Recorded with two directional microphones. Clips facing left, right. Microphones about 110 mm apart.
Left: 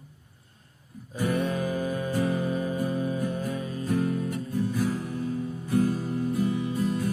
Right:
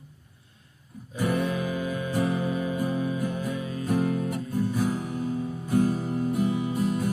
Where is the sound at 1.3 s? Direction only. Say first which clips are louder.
Even; 35° left (ahead or behind).